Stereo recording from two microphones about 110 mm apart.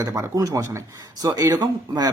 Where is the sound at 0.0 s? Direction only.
25° right (ahead or behind).